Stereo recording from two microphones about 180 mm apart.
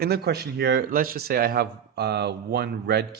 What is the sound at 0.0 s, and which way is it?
Speech, 60° right (ahead or behind).